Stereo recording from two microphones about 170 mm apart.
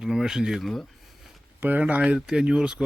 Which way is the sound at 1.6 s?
10° right (ahead or behind).